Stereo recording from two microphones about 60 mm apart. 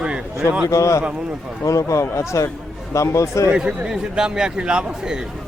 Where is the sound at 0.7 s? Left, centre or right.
Left.